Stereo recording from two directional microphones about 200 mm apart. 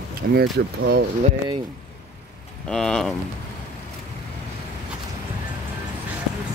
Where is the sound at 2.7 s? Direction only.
5° left (ahead or behind).